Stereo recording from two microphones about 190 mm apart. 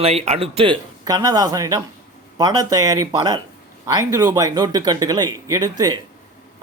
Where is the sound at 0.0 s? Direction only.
30° right (ahead or behind).